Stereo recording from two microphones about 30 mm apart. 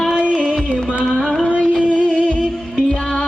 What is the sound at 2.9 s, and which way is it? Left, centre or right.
Music, left.